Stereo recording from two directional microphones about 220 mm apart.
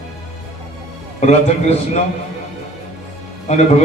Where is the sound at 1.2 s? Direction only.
30° left (ahead or behind).